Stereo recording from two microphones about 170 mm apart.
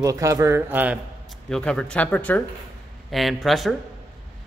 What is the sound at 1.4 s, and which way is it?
Speech, 5° left (ahead or behind).